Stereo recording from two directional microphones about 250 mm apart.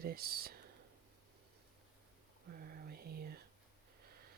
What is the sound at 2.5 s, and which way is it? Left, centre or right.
Whispering, right.